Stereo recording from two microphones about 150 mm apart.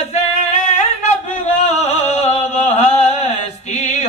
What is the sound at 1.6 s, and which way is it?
Music, 45° left (ahead or behind).